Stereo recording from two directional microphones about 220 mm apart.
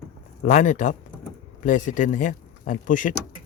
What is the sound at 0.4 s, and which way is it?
Speech, 35° left (ahead or behind).